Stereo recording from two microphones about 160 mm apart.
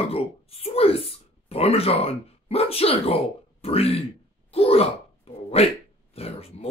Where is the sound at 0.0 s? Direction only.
35° left (ahead or behind).